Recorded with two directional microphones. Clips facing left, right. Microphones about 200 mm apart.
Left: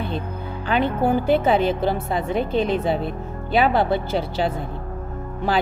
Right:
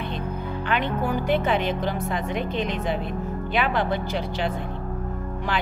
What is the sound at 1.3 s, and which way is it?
Music, 35° left (ahead or behind).